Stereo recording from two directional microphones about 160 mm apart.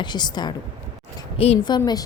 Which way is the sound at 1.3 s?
35° left (ahead or behind).